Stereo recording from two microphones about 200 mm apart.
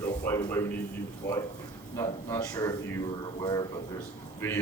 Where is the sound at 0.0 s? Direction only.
10° left (ahead or behind).